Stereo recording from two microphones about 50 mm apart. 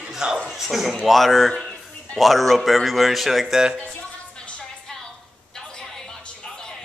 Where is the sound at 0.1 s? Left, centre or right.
Centre.